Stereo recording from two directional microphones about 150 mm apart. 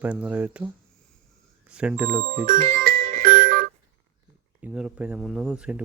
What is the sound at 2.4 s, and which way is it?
Music, 65° right (ahead or behind).